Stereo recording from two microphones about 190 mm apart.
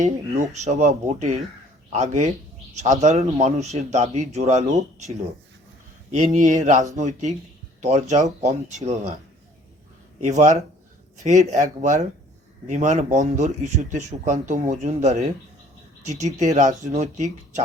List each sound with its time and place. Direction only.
0.0 s speech: 40° right (ahead or behind)
6.1 s speech: 40° right (ahead or behind)
10.2 s speech: 40° right (ahead or behind)